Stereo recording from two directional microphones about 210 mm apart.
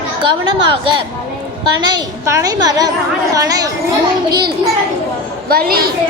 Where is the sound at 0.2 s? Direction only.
25° right (ahead or behind).